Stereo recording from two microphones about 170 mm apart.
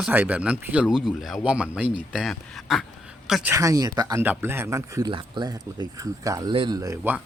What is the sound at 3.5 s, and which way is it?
Speech, 20° right (ahead or behind).